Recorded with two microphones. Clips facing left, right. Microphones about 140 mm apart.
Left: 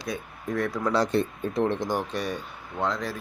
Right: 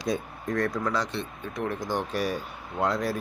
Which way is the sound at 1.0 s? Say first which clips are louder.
Left 9 dB; 45° left (ahead or behind).